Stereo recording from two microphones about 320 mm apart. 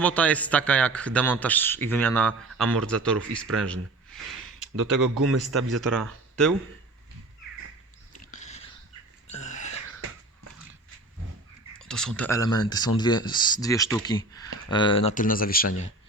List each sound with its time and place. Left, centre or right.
0.0 s speech: centre
4.8 s a man's voice: right
5.5 s speech: centre
8.3 s biting: left
9.2 s a sound: left
11.9 s speech: centre; by 15.9 s left